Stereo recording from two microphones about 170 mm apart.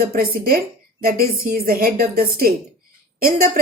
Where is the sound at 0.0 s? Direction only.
60° right (ahead or behind).